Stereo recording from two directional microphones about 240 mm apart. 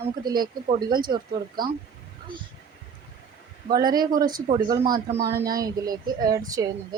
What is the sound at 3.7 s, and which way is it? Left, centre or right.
Speech, centre.